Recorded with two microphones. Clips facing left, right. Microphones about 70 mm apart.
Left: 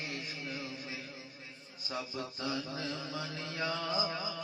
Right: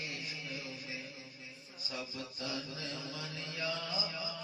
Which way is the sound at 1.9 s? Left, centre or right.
Left.